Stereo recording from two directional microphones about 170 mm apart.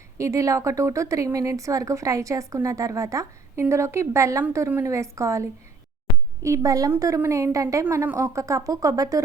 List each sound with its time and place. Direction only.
0.2 s a woman's voice: 20° right (ahead or behind)